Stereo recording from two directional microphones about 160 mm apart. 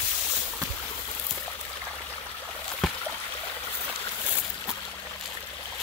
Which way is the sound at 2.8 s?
Centre (ahead or behind).